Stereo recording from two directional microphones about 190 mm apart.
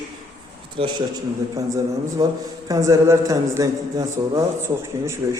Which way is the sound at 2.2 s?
15° right (ahead or behind).